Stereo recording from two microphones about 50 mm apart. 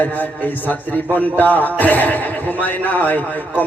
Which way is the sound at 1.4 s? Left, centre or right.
Left.